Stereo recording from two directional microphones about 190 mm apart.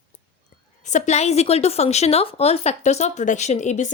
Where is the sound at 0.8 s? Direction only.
40° left (ahead or behind).